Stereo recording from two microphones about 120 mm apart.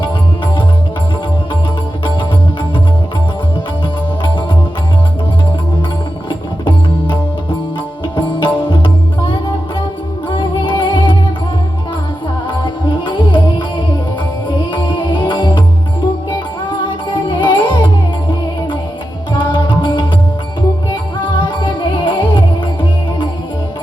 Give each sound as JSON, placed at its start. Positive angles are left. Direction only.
{"t": 6.2, "sound": "music", "side_deg": 40}
{"t": 10.2, "sound": "music", "side_deg": 40}
{"t": 12.6, "sound": "music", "side_deg": 40}
{"t": 14.7, "sound": "music", "side_deg": 45}
{"t": 21.3, "sound": "music", "side_deg": 40}